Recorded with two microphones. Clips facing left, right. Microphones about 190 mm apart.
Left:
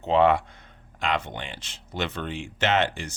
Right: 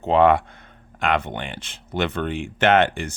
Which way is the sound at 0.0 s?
55° right (ahead or behind).